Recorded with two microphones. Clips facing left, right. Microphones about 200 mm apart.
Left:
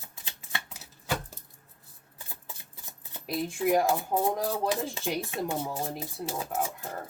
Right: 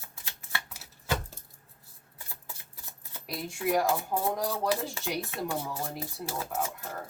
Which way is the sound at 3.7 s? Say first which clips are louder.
Left 1 dB; 25° left (ahead or behind).